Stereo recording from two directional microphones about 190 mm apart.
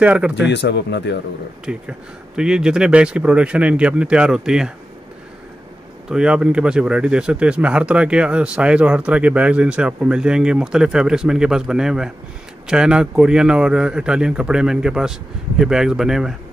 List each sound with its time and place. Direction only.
0.0 s speech: 5° right (ahead or behind)
0.5 s speech: 65° left (ahead or behind)
1.7 s speech: 5° right (ahead or behind)
6.0 s speech: 5° right (ahead or behind)